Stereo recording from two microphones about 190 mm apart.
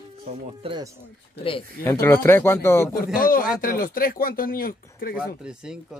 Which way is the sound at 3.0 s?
50° left (ahead or behind).